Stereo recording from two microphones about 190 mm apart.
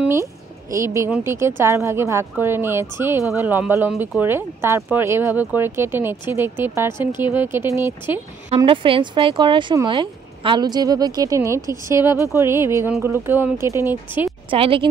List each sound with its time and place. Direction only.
0.0 s speech: 15° right (ahead or behind)
8.5 s speech: 30° right (ahead or behind)
14.5 s speech: 30° right (ahead or behind)